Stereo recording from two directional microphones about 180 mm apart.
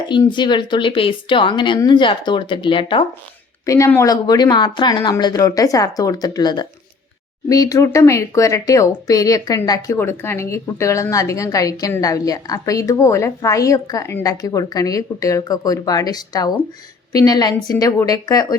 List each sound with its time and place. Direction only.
0.1 s speech: 25° left (ahead or behind)
3.7 s speech: 15° left (ahead or behind)